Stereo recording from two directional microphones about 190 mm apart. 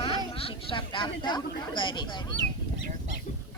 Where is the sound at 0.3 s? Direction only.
30° left (ahead or behind).